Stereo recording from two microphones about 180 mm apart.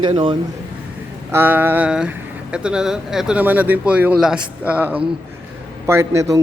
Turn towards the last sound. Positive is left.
turn(degrees=-15)  # may be behind; listen again after turning